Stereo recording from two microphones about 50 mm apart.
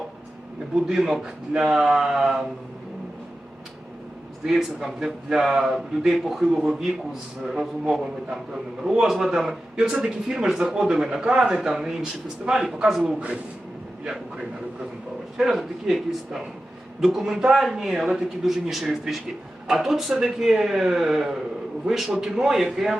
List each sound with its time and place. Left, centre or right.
0.9 s speech: centre
4.4 s speech: centre
11.2 s speech: centre
13.1 s a man's voice: right
15.5 s speech: centre